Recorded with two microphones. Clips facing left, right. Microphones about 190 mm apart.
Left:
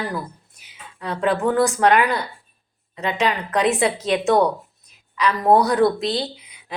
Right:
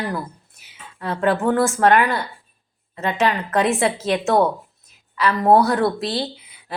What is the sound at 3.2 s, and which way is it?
Speech, 15° left (ahead or behind).